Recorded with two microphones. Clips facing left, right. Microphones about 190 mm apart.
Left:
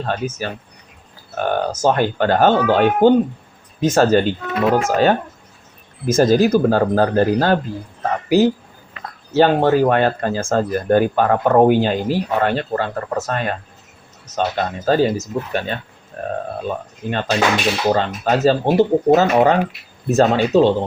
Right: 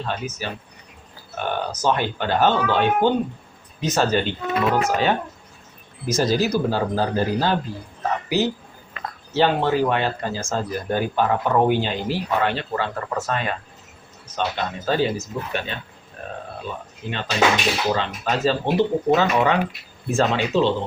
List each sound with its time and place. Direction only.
0.0 s speech: 45° left (ahead or behind)
9.3 s speech: 45° left (ahead or behind)